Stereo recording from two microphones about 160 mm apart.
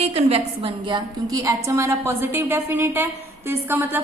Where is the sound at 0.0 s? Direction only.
40° right (ahead or behind).